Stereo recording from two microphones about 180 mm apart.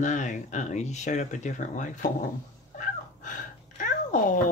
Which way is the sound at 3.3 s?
45° left (ahead or behind).